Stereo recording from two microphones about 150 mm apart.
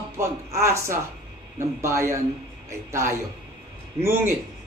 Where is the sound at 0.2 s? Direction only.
20° right (ahead or behind).